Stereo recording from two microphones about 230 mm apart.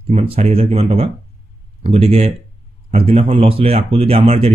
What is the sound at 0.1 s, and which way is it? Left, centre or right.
Speech, right.